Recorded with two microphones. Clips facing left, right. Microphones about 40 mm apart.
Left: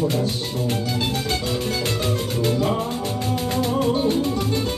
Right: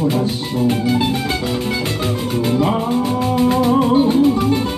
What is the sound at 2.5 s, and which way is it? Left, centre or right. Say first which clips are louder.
Music: right 6 dB; right.